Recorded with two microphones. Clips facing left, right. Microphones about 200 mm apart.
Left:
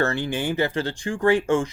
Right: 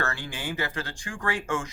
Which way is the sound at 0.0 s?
25° left (ahead or behind).